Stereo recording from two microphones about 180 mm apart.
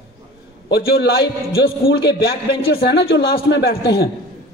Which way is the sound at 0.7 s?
65° left (ahead or behind).